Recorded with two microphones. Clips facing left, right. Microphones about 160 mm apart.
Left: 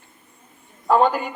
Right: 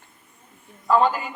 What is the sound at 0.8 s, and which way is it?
Speech, 65° left (ahead or behind).